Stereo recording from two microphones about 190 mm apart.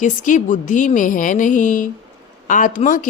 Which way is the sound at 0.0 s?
40° left (ahead or behind).